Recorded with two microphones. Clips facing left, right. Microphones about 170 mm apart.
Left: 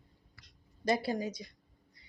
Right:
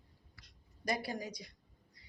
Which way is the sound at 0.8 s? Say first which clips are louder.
Left 6 dB; 25° left (ahead or behind).